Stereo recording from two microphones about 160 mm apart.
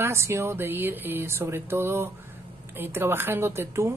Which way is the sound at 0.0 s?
15° right (ahead or behind).